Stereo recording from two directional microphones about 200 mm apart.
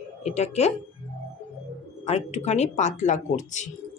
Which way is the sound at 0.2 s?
35° left (ahead or behind).